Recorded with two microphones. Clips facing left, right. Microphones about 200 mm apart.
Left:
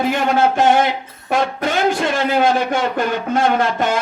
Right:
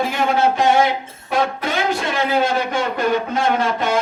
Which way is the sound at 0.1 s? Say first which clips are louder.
Left 2 dB; 50° left (ahead or behind).